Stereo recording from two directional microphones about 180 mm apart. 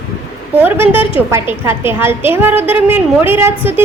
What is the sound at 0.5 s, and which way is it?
A woman's voice, 10° right (ahead or behind).